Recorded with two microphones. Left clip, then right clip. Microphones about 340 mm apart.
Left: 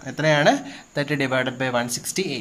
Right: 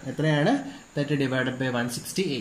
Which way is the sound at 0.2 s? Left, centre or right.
Left.